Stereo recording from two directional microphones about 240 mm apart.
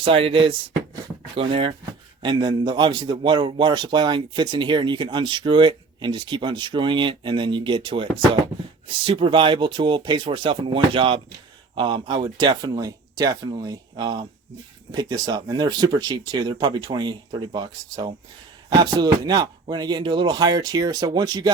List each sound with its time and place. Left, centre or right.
0.0 s a man's voice: right